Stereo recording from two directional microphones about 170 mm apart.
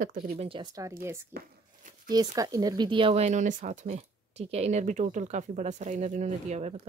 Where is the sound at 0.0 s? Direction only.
55° right (ahead or behind).